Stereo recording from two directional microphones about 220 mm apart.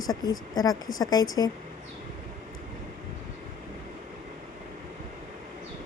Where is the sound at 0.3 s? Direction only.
15° left (ahead or behind).